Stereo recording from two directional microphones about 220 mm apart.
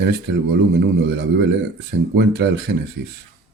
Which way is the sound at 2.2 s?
50° right (ahead or behind).